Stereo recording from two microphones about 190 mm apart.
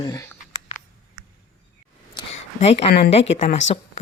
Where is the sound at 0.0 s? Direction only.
20° left (ahead or behind).